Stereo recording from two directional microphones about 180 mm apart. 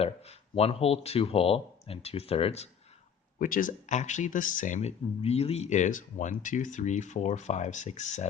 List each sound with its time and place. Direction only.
0.0 s speech: 35° left (ahead or behind)
3.3 s speech: 50° left (ahead or behind)